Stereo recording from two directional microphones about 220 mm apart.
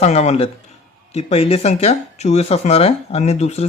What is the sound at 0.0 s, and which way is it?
Speech, 30° left (ahead or behind).